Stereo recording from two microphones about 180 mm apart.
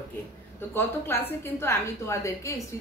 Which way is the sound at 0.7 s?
10° left (ahead or behind).